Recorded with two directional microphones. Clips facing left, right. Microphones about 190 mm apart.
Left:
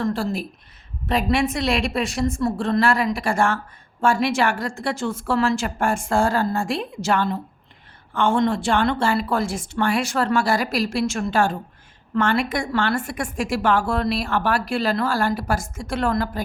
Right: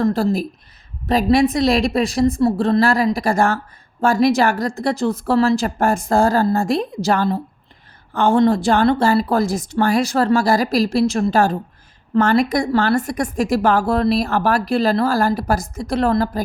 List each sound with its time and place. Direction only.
0.0 s speech: 40° right (ahead or behind)